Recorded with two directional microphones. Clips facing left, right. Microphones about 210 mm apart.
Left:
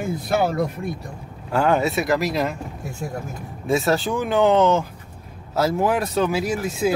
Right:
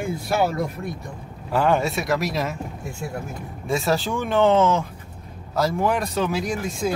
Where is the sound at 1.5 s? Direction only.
Centre (ahead or behind).